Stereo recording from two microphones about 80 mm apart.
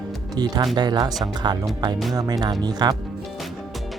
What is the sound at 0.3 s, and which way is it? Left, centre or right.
Speech, right.